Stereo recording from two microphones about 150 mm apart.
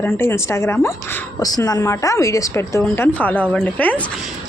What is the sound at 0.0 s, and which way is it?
A woman's voice, 15° left (ahead or behind).